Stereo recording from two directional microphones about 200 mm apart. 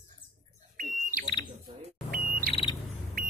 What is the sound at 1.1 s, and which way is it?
Smoke detector, 45° right (ahead or behind).